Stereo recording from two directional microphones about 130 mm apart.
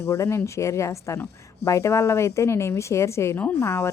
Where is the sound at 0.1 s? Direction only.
20° left (ahead or behind).